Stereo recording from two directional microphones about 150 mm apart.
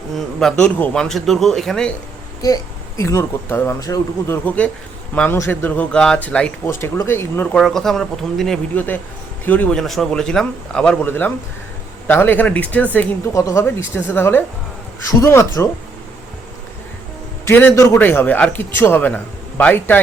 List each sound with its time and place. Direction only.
0.3 s speech: 5° left (ahead or behind)
3.0 s speech: 20° left (ahead or behind)
4.4 s a man's voice: 10° left (ahead or behind)
7.5 s a man's voice: 5° left (ahead or behind); by 15.7 s 20° left (ahead or behind)
17.4 s a man's voice: 15° left (ahead or behind)